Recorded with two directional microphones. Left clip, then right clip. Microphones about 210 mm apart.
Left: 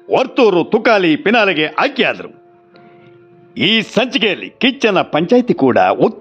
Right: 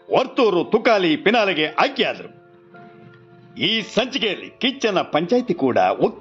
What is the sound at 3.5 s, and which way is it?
A man's voice, 40° left (ahead or behind).